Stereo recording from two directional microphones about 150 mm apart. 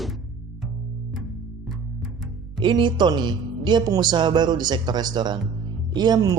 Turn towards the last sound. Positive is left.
turn(degrees=-25)  # may be behind; listen again after turning